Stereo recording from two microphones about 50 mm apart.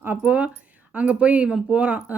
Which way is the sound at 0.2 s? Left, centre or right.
Right.